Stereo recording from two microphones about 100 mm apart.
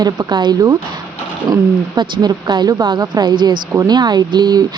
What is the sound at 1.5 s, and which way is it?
Speech, 40° right (ahead or behind).